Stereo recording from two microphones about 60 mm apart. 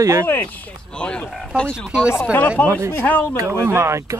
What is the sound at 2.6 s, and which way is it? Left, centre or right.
Speech, right.